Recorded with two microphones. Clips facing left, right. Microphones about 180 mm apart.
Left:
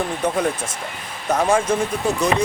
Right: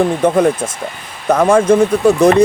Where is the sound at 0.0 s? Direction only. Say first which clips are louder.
Right 9 dB; 55° right (ahead or behind).